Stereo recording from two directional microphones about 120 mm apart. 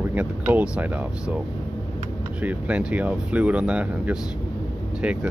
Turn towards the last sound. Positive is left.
turn(degrees=-10)  # may be behind; listen again after turning